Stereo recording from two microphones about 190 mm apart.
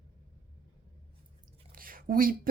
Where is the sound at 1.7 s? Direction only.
50° right (ahead or behind).